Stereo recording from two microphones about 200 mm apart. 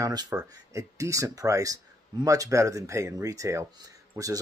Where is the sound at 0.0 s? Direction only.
20° right (ahead or behind).